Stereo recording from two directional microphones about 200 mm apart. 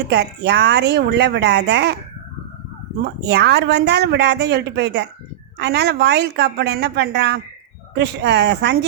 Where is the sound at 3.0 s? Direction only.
55° right (ahead or behind).